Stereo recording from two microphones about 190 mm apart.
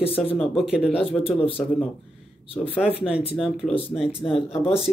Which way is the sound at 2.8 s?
5° right (ahead or behind).